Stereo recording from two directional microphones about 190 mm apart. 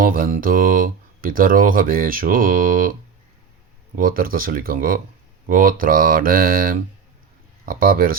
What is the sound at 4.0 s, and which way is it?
Speech, 50° right (ahead or behind).